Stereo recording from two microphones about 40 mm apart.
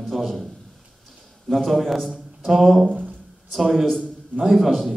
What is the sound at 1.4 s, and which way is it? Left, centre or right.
A man's voice, centre.